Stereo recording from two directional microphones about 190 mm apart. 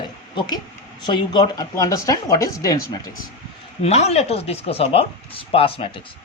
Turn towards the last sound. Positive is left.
turn(degrees=30)  # may be behind; listen again after turning